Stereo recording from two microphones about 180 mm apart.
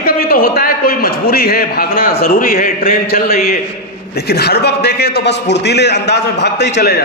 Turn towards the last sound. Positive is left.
turn(degrees=60)  # may be behind; listen again after turning